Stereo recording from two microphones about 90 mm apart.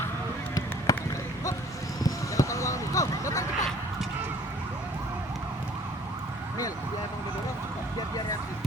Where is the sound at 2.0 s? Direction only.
35° left (ahead or behind).